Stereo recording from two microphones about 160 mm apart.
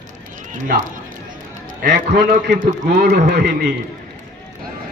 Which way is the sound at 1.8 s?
75° right (ahead or behind).